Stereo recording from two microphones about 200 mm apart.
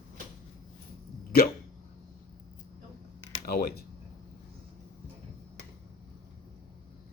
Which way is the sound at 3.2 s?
50° left (ahead or behind).